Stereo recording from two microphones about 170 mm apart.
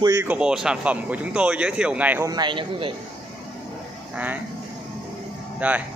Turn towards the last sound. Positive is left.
turn(degrees=-10)  # may be behind; listen again after turning